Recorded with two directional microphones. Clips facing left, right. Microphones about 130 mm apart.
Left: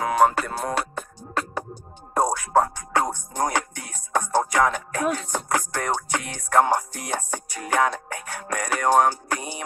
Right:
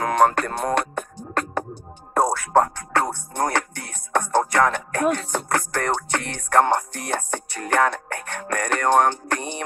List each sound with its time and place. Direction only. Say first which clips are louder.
0.0 s music: right 1 dB; 5° left (ahead or behind)
2.9 s music: right 1 dB; 15° left (ahead or behind)